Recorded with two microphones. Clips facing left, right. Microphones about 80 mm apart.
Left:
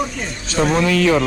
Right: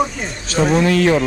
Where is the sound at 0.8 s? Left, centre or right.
Right.